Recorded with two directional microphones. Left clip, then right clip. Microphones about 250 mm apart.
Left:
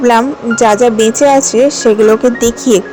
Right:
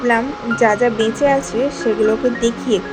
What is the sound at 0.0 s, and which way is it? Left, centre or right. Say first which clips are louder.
Speech: left 8 dB; left.